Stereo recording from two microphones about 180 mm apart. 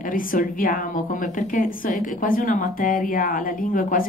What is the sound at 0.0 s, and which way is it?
Speech, 50° left (ahead or behind).